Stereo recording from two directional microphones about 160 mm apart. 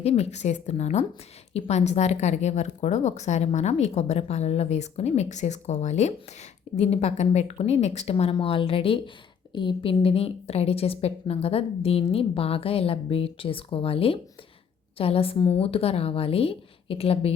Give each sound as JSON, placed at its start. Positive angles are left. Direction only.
{"t": 0.0, "sound": "a woman's voice", "side_deg": 40}